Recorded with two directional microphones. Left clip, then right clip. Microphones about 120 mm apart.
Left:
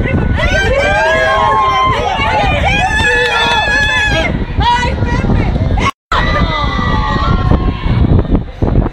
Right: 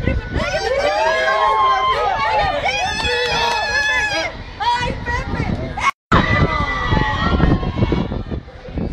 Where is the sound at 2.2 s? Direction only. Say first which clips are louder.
Left 4 dB; 25° right (ahead or behind).